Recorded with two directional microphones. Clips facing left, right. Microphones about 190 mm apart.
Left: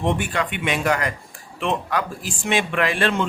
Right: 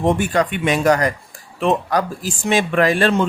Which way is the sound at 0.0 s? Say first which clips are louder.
Right 6 dB; 40° right (ahead or behind).